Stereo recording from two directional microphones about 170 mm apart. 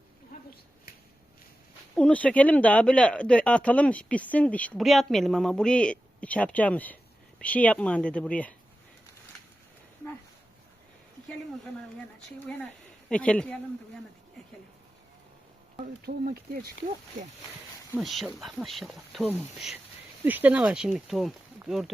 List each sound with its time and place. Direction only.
0.3 s a sound: 55° left (ahead or behind)
2.0 s speech: 10° left (ahead or behind)
13.1 s speech: 5° left (ahead or behind)
16.0 s speech: 60° right (ahead or behind)
17.9 s speech: centre (ahead or behind)